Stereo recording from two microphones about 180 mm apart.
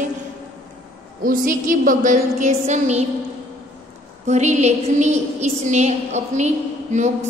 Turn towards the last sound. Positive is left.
turn(degrees=-40)  # may be behind; listen again after turning